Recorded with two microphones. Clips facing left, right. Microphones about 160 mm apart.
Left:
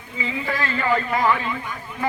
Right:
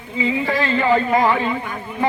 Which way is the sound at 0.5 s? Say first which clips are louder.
Right 4 dB; 20° right (ahead or behind).